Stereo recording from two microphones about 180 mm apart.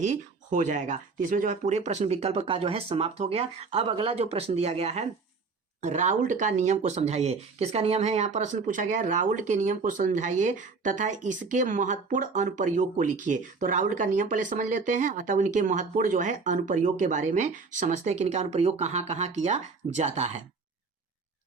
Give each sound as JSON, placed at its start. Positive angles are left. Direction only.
{"t": 0.0, "sound": "speech", "side_deg": -45}